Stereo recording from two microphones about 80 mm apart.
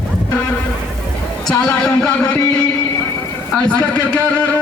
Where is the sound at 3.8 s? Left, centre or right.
Centre.